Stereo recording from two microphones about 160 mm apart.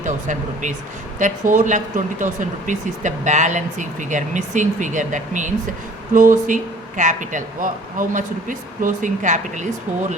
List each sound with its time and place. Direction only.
0.0 s speech: 50° right (ahead or behind)